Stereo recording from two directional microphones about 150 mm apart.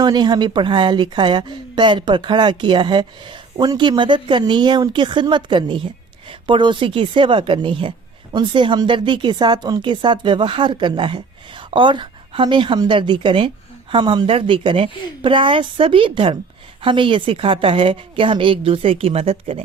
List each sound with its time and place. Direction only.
0.0 s speech: 30° right (ahead or behind)